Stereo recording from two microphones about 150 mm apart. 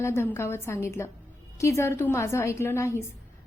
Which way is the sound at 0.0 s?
15° left (ahead or behind).